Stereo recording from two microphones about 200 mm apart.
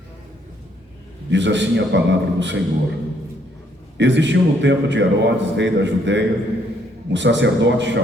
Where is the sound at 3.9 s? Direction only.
60° right (ahead or behind).